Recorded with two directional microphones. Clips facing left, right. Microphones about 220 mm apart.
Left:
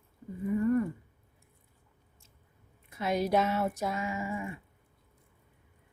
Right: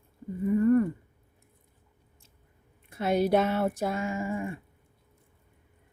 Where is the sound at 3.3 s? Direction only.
55° right (ahead or behind).